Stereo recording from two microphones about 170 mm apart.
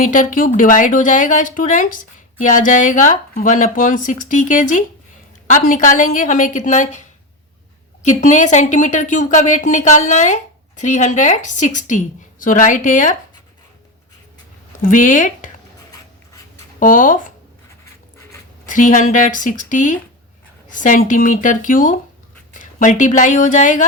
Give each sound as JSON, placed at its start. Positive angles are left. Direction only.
{"t": 0.0, "sound": "a woman's voice", "side_deg": 50}
{"t": 14.8, "sound": "a woman's voice", "side_deg": 50}
{"t": 16.8, "sound": "a woman's voice", "side_deg": 50}
{"t": 18.6, "sound": "a woman's voice", "side_deg": 50}